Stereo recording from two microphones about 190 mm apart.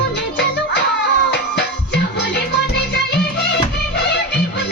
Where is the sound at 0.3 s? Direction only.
65° left (ahead or behind).